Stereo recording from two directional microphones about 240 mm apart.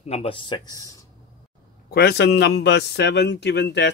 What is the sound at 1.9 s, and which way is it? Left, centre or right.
A man's voice, left.